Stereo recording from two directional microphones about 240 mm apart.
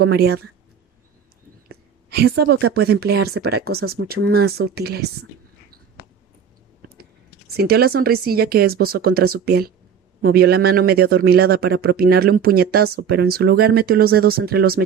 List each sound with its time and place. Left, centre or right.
0.0 s speech: right
2.0 s a woman's voice: right
6.8 s speech: right